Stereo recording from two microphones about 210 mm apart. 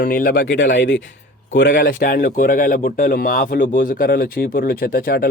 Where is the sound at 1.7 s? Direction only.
45° left (ahead or behind).